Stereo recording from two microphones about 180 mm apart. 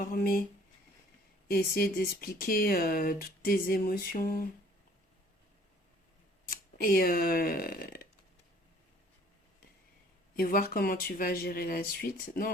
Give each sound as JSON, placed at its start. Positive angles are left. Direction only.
{"t": 0.0, "sound": "speech", "side_deg": 50}
{"t": 1.5, "sound": "speech", "side_deg": 55}
{"t": 6.5, "sound": "speech", "side_deg": 55}
{"t": 10.3, "sound": "speech", "side_deg": 55}